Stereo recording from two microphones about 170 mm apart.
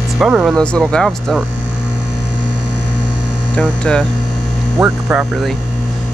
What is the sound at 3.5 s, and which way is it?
Speech, 5° left (ahead or behind).